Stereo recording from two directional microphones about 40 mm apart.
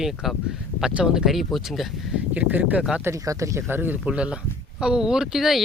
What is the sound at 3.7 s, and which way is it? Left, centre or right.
Speech, right.